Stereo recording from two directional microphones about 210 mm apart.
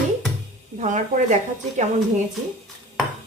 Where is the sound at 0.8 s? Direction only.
35° right (ahead or behind).